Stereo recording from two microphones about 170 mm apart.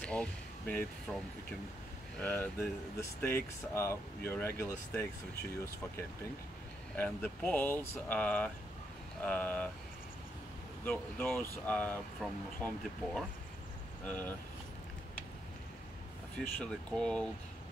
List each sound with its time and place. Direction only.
0.0 s speech: 5° left (ahead or behind)
2.1 s speech: 10° left (ahead or behind)
7.0 s speech: 10° left (ahead or behind)
10.9 s speech: 10° left (ahead or behind)
16.3 s speech: 5° left (ahead or behind)